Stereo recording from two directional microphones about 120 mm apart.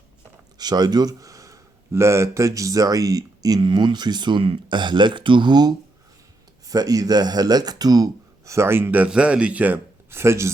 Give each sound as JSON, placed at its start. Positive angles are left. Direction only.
{"t": 0.6, "sound": "speech", "side_deg": -35}